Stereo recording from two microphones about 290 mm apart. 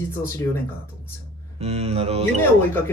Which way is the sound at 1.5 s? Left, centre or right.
Right.